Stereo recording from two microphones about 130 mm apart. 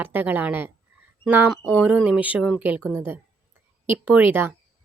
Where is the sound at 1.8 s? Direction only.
10° right (ahead or behind).